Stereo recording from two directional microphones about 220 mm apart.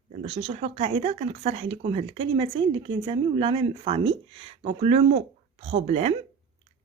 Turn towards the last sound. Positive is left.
turn(degrees=-30)  # may be behind; listen again after turning